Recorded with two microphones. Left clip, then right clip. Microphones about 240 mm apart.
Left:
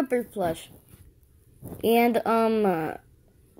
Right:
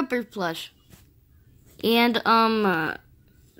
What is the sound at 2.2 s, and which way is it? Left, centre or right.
Speech, centre.